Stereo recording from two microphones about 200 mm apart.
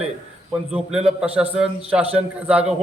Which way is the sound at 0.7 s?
5° right (ahead or behind).